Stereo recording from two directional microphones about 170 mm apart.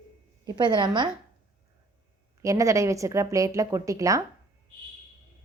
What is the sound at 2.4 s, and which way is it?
A woman's voice, 20° right (ahead or behind).